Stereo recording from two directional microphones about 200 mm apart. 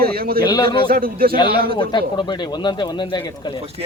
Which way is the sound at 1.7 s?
25° left (ahead or behind).